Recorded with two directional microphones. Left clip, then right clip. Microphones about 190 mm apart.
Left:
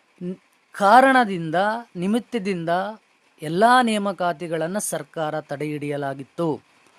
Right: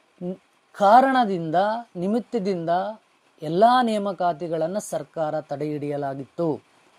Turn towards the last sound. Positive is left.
turn(degrees=10)  # may be behind; listen again after turning